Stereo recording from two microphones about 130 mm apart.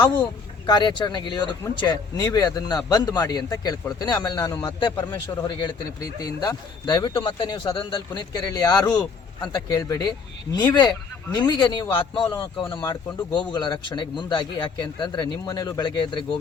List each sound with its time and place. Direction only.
0.7 s a man's voice: 35° left (ahead or behind)